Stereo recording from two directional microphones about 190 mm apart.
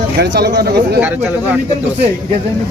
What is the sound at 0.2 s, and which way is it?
Speech, 60° right (ahead or behind).